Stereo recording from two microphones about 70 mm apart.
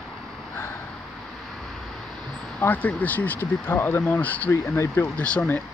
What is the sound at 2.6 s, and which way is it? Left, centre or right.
Speech, left.